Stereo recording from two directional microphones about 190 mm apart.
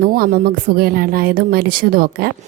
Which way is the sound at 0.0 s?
50° right (ahead or behind).